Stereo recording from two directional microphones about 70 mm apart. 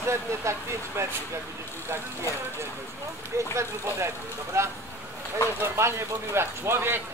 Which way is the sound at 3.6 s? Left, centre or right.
Right.